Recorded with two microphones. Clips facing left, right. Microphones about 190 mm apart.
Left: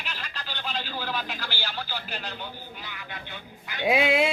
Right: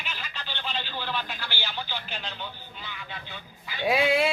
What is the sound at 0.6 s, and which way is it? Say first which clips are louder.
A man's voice: left 1 dB; 10° left (ahead or behind).